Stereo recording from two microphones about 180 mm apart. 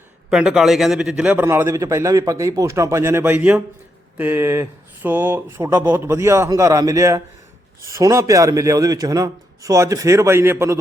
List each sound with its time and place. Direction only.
0.3 s a man's voice: 5° right (ahead or behind)